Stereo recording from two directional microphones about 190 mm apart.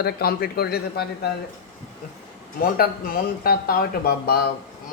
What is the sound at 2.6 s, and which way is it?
A man's voice, 50° left (ahead or behind).